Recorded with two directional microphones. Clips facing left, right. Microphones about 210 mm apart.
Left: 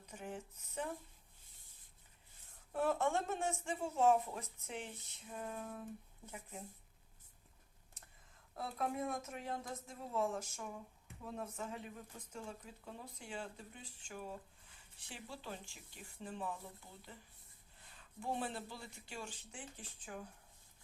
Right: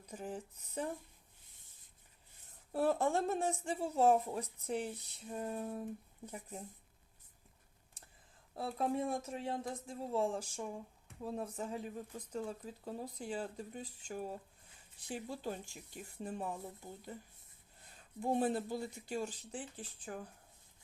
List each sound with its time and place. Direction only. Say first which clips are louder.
0.0 s speech: right 4 dB; 35° right (ahead or behind)
2.7 s speech: right 3 dB; 35° right (ahead or behind)
8.0 s a sound: right 2 dB; 30° right (ahead or behind)
8.5 s speech: right 4 dB; 30° right (ahead or behind)